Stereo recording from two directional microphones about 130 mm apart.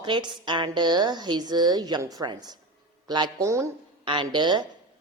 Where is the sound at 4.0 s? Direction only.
40° right (ahead or behind).